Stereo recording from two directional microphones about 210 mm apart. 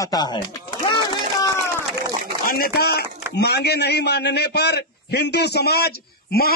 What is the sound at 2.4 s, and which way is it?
A man's voice, 45° left (ahead or behind).